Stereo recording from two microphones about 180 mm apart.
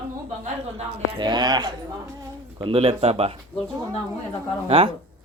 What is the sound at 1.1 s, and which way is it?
Speech, 25° right (ahead or behind).